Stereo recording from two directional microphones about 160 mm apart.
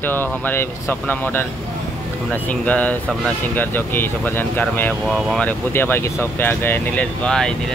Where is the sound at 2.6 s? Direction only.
10° left (ahead or behind).